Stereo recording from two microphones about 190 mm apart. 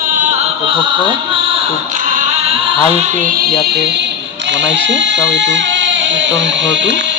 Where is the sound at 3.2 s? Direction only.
50° right (ahead or behind).